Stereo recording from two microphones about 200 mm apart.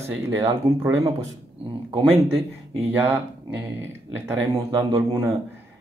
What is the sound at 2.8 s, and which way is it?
Speech, 10° right (ahead or behind).